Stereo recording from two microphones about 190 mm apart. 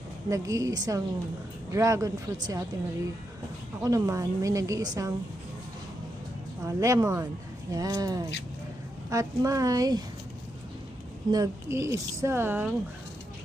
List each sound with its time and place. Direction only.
0.3 s a woman's voice: 15° right (ahead or behind)
3.8 s a woman's voice: 20° right (ahead or behind)
6.7 s a woman's voice: 15° right (ahead or behind)
11.3 s a woman's voice: 15° right (ahead or behind)